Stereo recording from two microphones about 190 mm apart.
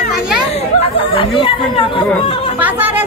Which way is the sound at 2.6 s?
10° right (ahead or behind).